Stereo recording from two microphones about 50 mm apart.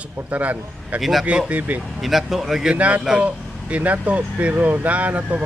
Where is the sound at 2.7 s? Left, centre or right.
Right.